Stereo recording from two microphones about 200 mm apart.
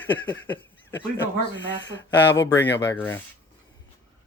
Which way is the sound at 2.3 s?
70° left (ahead or behind).